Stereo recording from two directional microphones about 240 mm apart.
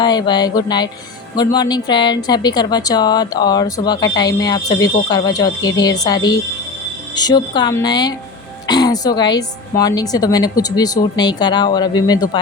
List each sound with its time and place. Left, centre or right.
0.0 s speech: centre